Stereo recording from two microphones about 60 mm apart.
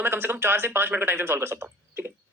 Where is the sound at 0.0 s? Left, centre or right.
Right.